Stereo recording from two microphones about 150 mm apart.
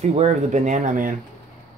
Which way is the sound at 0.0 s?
50° right (ahead or behind).